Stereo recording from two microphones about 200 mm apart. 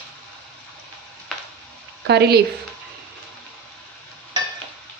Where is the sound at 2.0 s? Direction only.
55° right (ahead or behind).